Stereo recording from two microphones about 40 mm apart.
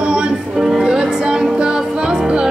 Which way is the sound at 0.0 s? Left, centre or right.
Right.